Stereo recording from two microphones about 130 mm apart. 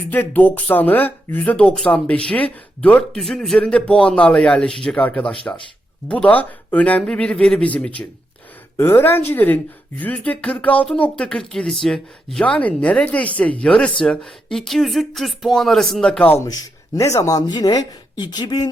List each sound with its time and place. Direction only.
0.1 s speech: 15° left (ahead or behind)
16.3 s speech: 25° left (ahead or behind)